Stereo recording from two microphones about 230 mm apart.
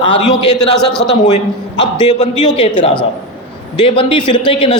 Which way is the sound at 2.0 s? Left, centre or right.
Left.